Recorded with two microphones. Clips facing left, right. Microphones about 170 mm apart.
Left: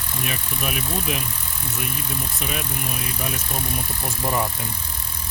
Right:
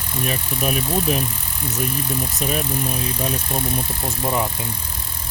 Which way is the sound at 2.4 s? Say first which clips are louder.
Right 6 dB; 40° right (ahead or behind).